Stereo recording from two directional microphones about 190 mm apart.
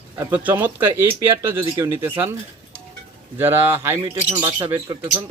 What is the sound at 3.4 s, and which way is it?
Speech, 10° right (ahead or behind).